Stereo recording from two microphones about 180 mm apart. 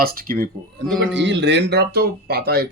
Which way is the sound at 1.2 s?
80° right.